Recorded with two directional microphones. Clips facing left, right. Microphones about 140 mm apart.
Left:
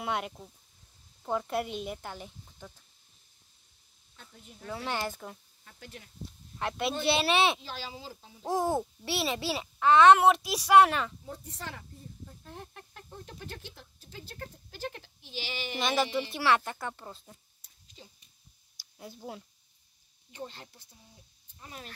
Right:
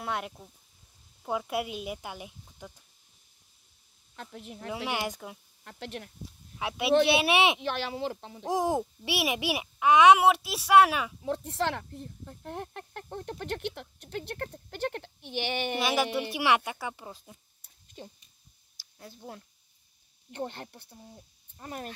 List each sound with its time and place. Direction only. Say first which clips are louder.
0.0 s a child's voice: left 1 dB; centre (ahead or behind)
4.2 s speech: right 10 dB; 80° right
4.6 s a child's voice: right 1 dB; 15° right (ahead or behind)
5.6 s speech: right 9 dB; 75° right (ahead or behind)
6.6 s a child's voice: right 6 dB; 5° right (ahead or behind)
7.6 s speech: right 10 dB; 65° right (ahead or behind)
8.5 s a child's voice: right 1 dB; 15° right (ahead or behind)
11.2 s speech: right 12 dB; 75° right (ahead or behind); by 15.8 s 60° right (ahead or behind)
15.8 s a child's voice: left 1 dB; 10° right (ahead or behind)
17.8 s dog: right 8 dB; 50° right (ahead or behind)
18.9 s speech: left 2 dB; 5° left (ahead or behind)
20.2 s speech: right 6 dB; 60° right (ahead or behind)